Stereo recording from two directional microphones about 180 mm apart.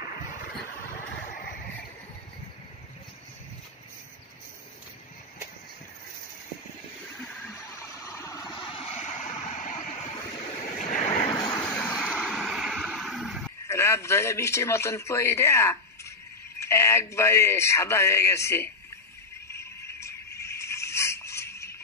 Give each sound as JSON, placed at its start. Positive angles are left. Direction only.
{"t": 0.0, "sound": "vehicle", "side_deg": 55}
{"t": 7.5, "sound": "vehicle", "side_deg": 15}
{"t": 8.5, "sound": "vehicle", "side_deg": 30}
{"t": 10.9, "sound": "vehicle", "side_deg": 40}
{"t": 11.3, "sound": "vehicle", "side_deg": 25}
{"t": 11.6, "sound": "vehicle", "side_deg": 5}
{"t": 13.7, "sound": "a man's voice", "side_deg": 15}
{"t": 19.5, "sound": "music", "side_deg": 15}
{"t": 20.3, "sound": "a sound", "side_deg": 15}